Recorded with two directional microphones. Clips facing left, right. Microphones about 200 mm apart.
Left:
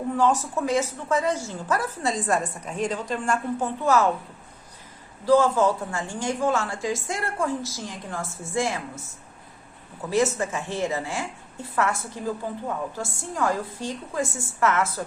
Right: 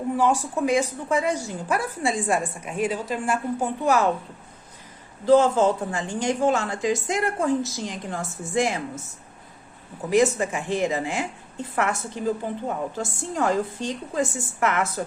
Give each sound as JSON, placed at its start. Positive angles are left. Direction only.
{"t": 0.2, "sound": "a woman's voice", "side_deg": -10}
{"t": 5.2, "sound": "a woman's voice", "side_deg": -20}
{"t": 10.1, "sound": "a woman's voice", "side_deg": -15}